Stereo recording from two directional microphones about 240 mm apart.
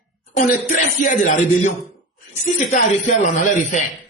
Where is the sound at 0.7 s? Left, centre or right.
Left.